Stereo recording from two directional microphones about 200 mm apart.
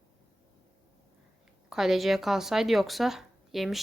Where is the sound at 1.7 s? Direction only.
Centre (ahead or behind).